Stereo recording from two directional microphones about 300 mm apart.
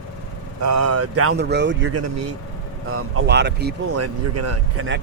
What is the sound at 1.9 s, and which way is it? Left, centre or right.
Speech, right.